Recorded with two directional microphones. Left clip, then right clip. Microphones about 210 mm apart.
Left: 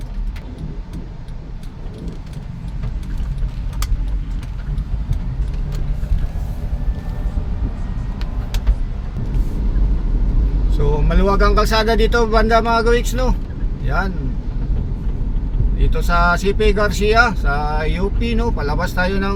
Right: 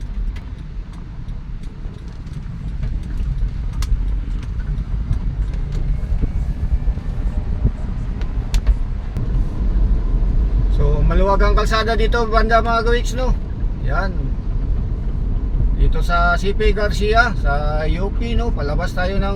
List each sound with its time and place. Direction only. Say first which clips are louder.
11.1 s speech: even; 30° left (ahead or behind)
15.8 s speech: left 1 dB; 35° left (ahead or behind)